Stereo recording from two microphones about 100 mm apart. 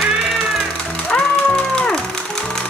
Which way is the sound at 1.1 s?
5° left (ahead or behind).